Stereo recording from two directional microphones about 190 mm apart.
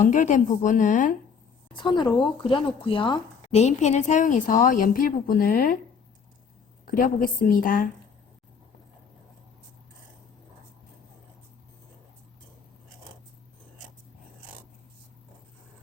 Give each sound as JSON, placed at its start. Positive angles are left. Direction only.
{"t": 0.0, "sound": "a woman's voice", "side_deg": 40}
{"t": 1.8, "sound": "a woman's voice", "side_deg": 25}
{"t": 6.8, "sound": "a woman's voice", "side_deg": 50}